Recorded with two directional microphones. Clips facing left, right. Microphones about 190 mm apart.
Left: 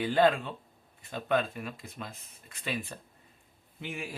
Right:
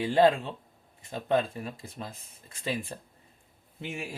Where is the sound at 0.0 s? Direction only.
25° right (ahead or behind).